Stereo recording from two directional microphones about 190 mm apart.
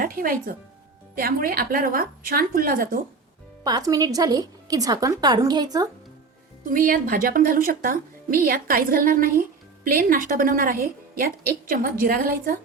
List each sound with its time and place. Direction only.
0.0 s speech: 50° right (ahead or behind)
3.6 s a woman's voice: 20° right (ahead or behind)
6.7 s speech: 50° right (ahead or behind)